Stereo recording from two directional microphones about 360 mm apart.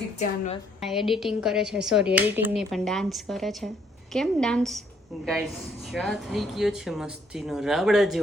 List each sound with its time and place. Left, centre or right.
0.2 s a woman's voice: centre
0.8 s speech: centre